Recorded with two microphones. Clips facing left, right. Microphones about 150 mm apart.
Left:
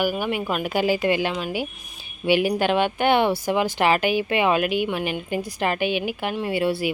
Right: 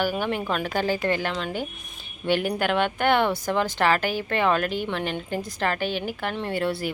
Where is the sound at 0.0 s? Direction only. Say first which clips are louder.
Left 2 dB; 10° left (ahead or behind).